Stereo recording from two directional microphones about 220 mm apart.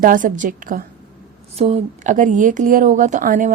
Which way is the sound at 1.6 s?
30° right (ahead or behind).